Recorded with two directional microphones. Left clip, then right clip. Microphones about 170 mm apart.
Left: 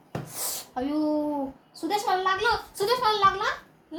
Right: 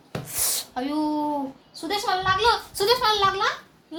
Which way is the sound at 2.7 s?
25° right (ahead or behind).